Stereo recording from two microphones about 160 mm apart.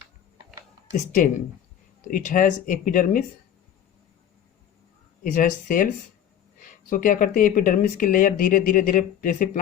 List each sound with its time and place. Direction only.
2.0 s speech: 55° left (ahead or behind)
5.2 s speech: 55° left (ahead or behind)